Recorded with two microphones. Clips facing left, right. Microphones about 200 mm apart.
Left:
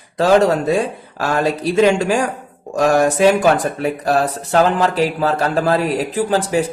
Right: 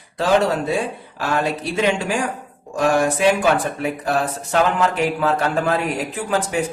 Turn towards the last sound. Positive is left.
turn(degrees=35)  # may be behind; listen again after turning